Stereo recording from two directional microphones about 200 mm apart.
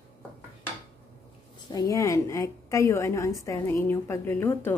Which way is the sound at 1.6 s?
20° left (ahead or behind).